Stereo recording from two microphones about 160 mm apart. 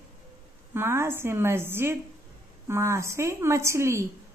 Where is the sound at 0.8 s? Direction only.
15° right (ahead or behind).